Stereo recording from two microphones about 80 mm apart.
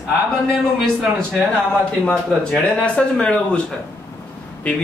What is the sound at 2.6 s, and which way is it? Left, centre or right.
A man's voice, centre.